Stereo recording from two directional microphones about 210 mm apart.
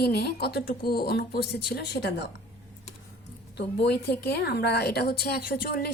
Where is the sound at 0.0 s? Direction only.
50° left (ahead or behind).